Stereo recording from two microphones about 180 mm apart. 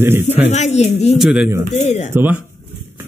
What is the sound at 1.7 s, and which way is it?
Speech, 40° left (ahead or behind).